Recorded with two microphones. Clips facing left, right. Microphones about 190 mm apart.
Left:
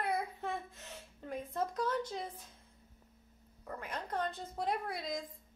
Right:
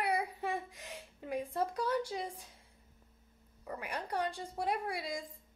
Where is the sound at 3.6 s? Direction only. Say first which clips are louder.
Right 2 dB; 10° right (ahead or behind).